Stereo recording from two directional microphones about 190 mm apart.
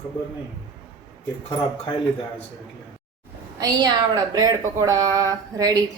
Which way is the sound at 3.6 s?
20° right (ahead or behind).